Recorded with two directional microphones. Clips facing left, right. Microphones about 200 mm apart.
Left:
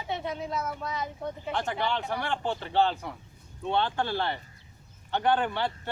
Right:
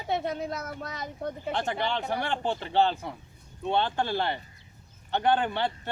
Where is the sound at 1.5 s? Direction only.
20° right (ahead or behind).